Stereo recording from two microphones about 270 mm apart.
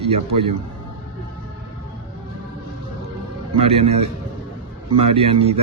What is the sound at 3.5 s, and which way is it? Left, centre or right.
A man's voice, right.